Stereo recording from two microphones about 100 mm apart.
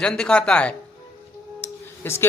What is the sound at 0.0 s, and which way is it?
Speech, 5° left (ahead or behind).